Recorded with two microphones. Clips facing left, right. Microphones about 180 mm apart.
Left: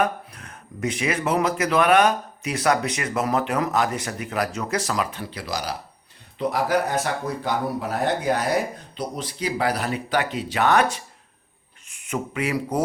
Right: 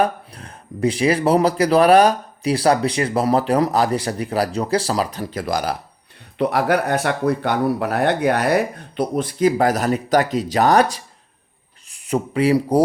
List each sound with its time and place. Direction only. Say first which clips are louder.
0.0 s speech: right 4 dB; 30° right (ahead or behind); by 5.7 s 50° right (ahead or behind)
6.4 s speech: right 4 dB; 65° right (ahead or behind); by 12.8 s 30° right (ahead or behind)